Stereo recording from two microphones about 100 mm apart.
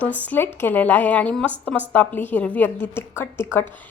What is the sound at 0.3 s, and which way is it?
A woman's voice, 20° left (ahead or behind).